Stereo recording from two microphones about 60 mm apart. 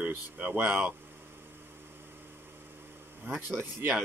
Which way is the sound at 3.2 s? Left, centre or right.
Right.